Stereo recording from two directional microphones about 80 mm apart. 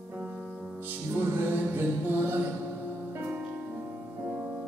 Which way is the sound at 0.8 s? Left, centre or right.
Right.